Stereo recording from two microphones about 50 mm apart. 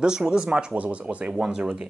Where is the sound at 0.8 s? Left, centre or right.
Right.